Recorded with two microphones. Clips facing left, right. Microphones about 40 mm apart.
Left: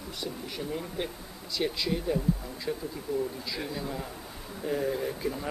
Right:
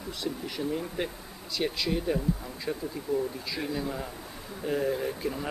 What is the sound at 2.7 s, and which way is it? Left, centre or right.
Speech, right.